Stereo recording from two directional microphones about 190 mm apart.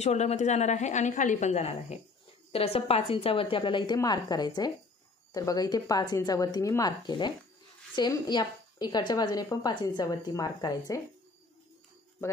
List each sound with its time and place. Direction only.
0.0 s a woman's voice: 35° left (ahead or behind); by 11.0 s 20° left (ahead or behind)